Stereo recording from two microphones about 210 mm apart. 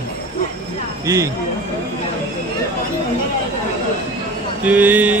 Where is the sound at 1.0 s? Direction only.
15° right (ahead or behind).